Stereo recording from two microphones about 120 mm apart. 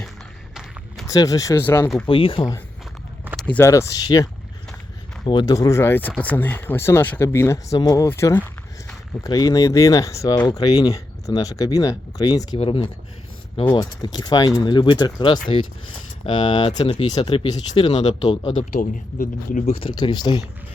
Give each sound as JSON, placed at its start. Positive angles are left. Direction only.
{"t": 0.5, "sound": "walk", "side_deg": -5}
{"t": 1.0, "sound": "speech", "side_deg": 30}
{"t": 2.0, "sound": "speech", "side_deg": 45}
{"t": 3.3, "sound": "a sound", "side_deg": 10}
{"t": 3.6, "sound": "speech", "side_deg": 25}
{"t": 5.5, "sound": "speech", "side_deg": 25}
{"t": 12.5, "sound": "speech", "side_deg": 50}
{"t": 13.7, "sound": "speech", "side_deg": 35}
{"t": 16.7, "sound": "speech", "side_deg": 55}
{"t": 17.1, "sound": "speech", "side_deg": 40}
{"t": 19.7, "sound": "speech", "side_deg": 45}